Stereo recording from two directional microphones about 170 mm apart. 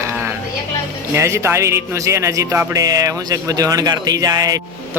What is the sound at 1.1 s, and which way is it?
A man's voice, 15° right (ahead or behind).